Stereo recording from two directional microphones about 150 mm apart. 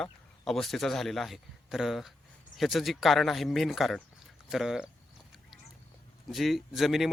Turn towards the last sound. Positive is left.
turn(degrees=0)  # may be behind; listen again after turning